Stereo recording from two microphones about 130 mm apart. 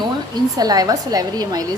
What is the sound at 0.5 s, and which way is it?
A woman's voice, 30° right (ahead or behind).